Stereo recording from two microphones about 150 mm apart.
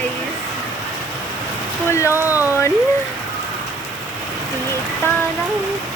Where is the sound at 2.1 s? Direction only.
15° right (ahead or behind).